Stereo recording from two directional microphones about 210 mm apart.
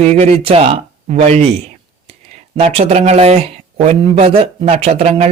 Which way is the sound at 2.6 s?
30° right (ahead or behind).